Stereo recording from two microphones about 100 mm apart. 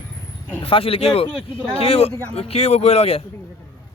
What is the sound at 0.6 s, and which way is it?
Speech, 70° left (ahead or behind).